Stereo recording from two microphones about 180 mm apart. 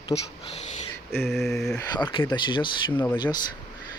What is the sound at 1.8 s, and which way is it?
Speech, 25° left (ahead or behind).